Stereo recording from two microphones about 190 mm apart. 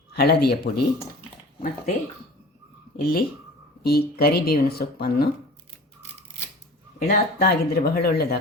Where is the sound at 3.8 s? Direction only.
55° left (ahead or behind).